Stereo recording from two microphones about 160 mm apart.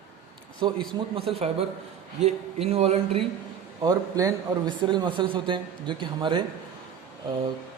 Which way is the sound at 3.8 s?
25° right (ahead or behind).